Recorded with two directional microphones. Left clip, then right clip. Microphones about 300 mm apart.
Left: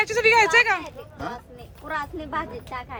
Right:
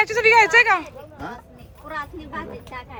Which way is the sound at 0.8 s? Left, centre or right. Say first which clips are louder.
Left 1 dB; left.